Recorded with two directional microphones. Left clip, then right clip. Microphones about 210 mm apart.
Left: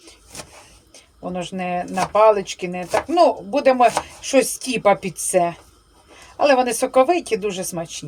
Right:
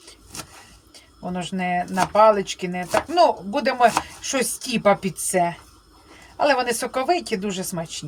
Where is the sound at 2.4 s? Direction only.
20° right (ahead or behind).